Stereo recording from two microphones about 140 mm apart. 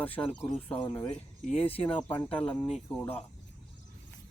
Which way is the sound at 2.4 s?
10° left (ahead or behind).